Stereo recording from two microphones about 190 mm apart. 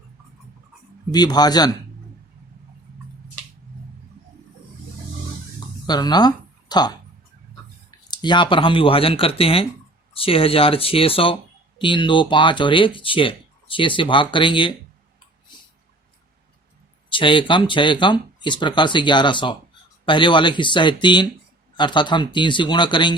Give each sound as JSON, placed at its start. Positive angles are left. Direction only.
{"t": 1.1, "sound": "speech", "side_deg": 20}
{"t": 5.8, "sound": "speech", "side_deg": 20}
{"t": 17.1, "sound": "speech", "side_deg": 25}